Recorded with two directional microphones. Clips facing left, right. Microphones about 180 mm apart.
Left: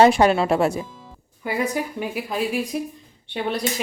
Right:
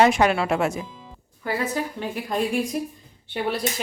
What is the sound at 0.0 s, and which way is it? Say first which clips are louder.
Speech: left 3 dB; 30° left (ahead or behind).